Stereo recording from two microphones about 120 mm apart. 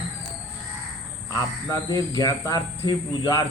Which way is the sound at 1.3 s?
25° left (ahead or behind).